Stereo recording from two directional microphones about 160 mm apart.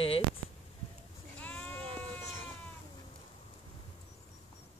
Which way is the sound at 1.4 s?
10° left (ahead or behind).